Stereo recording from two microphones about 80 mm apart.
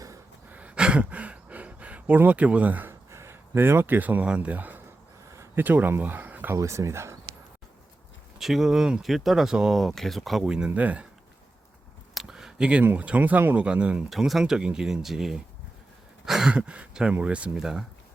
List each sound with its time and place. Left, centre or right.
0.5 s a sound: centre
3.1 s speech: right
5.3 s a sound: right
5.6 s speech: right
6.5 s speech: right
8.4 s speech: centre
10.7 s speech: centre
12.1 s a sound: centre
12.8 s speech: right
14.1 s speech: centre